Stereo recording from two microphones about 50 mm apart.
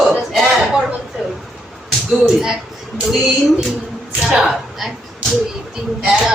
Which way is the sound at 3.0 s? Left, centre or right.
Centre.